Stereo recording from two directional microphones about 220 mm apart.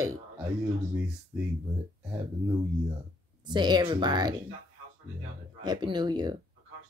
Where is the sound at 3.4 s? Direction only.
20° right (ahead or behind).